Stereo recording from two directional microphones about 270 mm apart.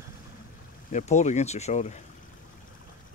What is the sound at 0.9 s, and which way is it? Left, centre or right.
Speech, left.